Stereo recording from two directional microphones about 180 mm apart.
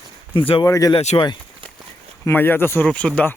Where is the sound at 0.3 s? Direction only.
30° left (ahead or behind).